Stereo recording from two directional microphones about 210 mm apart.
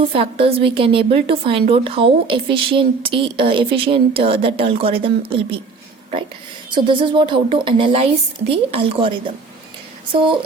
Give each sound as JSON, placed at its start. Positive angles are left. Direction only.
{"t": 0.1, "sound": "a woman's voice", "side_deg": -25}
{"t": 6.7, "sound": "a woman's voice", "side_deg": -20}